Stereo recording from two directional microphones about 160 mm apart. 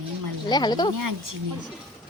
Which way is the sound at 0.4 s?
25° left (ahead or behind).